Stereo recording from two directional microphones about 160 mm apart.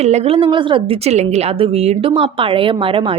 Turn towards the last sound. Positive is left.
turn(degrees=-35)  # may be behind; listen again after turning